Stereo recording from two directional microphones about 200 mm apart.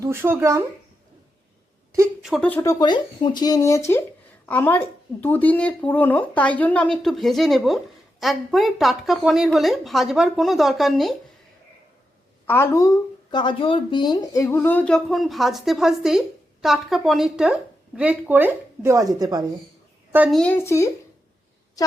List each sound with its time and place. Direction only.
0.0 s speech: 10° right (ahead or behind)
2.2 s speech: centre (ahead or behind)
12.5 s speech: 10° left (ahead or behind); by 19.5 s 20° right (ahead or behind)
20.1 s speech: 5° right (ahead or behind)
20.4 s speech: 10° left (ahead or behind)